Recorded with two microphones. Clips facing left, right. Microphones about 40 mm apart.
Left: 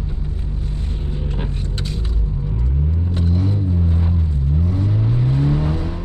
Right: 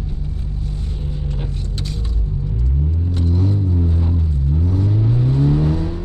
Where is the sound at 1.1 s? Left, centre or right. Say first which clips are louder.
Left 2 dB; left.